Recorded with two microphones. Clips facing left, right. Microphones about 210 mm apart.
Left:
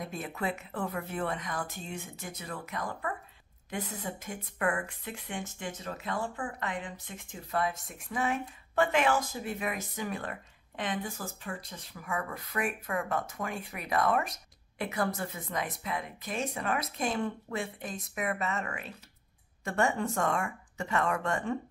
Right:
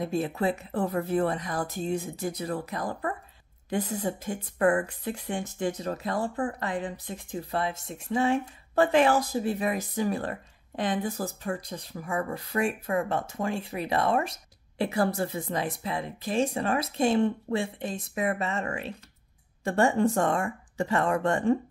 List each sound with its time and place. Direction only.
0.0 s speech: 30° right (ahead or behind)